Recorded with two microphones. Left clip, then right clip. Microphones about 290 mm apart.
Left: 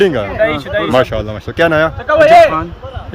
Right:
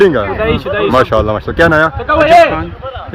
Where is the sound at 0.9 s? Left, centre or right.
Centre.